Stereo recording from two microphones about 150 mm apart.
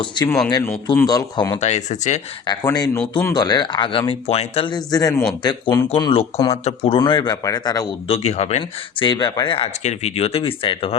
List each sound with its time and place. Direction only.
0.2 s speech: 30° left (ahead or behind)
1.5 s speech: 45° left (ahead or behind)
2.6 s speech: 25° left (ahead or behind)
3.0 s speech: 10° left (ahead or behind)
3.3 s speech: 25° left (ahead or behind)
6.0 s speech: 40° left (ahead or behind)
7.0 s speech: 30° left (ahead or behind)
8.0 s speech: 40° left (ahead or behind)
9.8 s speech: 45° left (ahead or behind)